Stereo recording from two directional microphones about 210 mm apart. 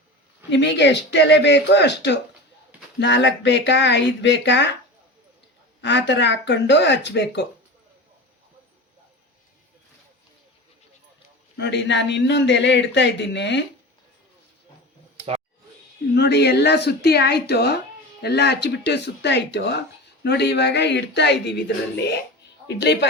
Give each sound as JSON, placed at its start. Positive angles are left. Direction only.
{"t": 0.5, "sound": "speech", "side_deg": 55}
{"t": 5.8, "sound": "speech", "side_deg": 55}
{"t": 11.5, "sound": "speech", "side_deg": 55}
{"t": 16.1, "sound": "speech", "side_deg": 55}